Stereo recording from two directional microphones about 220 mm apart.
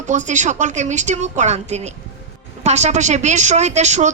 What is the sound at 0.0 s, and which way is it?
Speech, 35° right (ahead or behind).